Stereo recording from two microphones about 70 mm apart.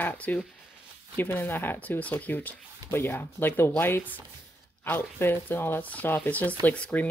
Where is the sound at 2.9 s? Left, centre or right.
Left.